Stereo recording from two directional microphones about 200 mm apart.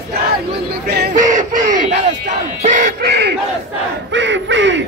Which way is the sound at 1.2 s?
40° right (ahead or behind).